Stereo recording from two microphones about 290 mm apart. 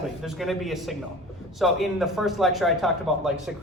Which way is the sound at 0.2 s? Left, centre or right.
Centre.